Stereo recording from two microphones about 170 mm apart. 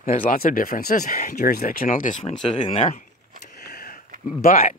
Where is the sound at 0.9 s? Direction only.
45° left (ahead or behind).